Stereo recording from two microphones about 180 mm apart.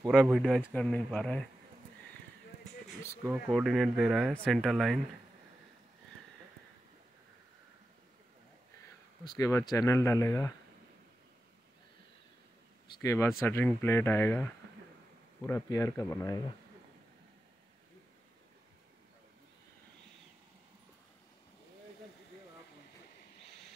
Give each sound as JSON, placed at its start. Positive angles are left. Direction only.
{"t": 0.1, "sound": "speech", "side_deg": 0}
{"t": 0.7, "sound": "speech", "side_deg": 5}
{"t": 3.5, "sound": "speech", "side_deg": 0}
{"t": 9.4, "sound": "speech", "side_deg": 15}
{"t": 13.0, "sound": "speech", "side_deg": 15}